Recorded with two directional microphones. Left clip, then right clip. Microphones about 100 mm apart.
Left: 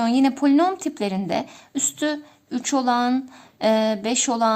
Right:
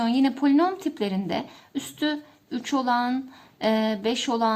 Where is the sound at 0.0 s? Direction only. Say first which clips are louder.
Left 3 dB; 45° left (ahead or behind).